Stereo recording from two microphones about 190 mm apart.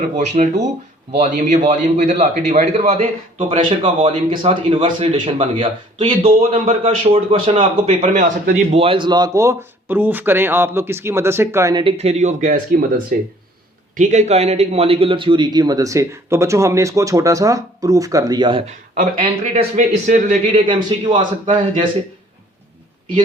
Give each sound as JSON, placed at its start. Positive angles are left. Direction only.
{"t": 0.2, "sound": "a man's voice", "side_deg": -40}
{"t": 3.5, "sound": "a man's voice", "side_deg": -30}
{"t": 8.0, "sound": "a man's voice", "side_deg": -40}
{"t": 8.8, "sound": "speech", "side_deg": -25}
{"t": 11.8, "sound": "a man's voice", "side_deg": -30}
{"t": 18.9, "sound": "a man's voice", "side_deg": -45}
{"t": 21.1, "sound": "a man's voice", "side_deg": -25}